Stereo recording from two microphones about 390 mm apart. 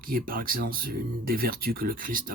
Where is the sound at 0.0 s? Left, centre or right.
Right.